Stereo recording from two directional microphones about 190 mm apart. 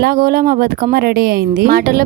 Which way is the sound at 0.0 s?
50° right (ahead or behind).